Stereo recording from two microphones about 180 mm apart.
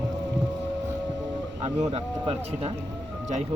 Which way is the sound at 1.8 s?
30° right (ahead or behind).